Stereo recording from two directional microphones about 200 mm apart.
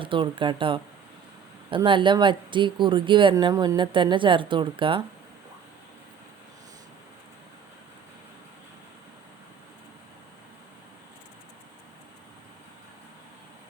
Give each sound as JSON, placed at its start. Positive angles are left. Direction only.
{"t": 0.0, "sound": "speech", "side_deg": -25}